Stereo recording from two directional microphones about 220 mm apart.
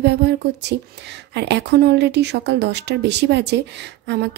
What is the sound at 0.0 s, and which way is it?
A woman's voice, 50° right (ahead or behind).